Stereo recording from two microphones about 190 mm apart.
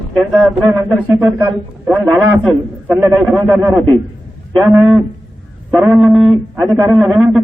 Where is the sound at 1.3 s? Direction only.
10° right (ahead or behind).